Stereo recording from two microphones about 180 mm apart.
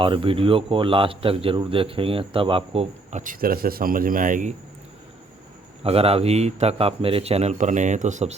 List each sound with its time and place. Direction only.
0.0 s a man's voice: 30° right (ahead or behind); by 4.5 s 45° right (ahead or behind)
5.8 s a man's voice: 35° right (ahead or behind)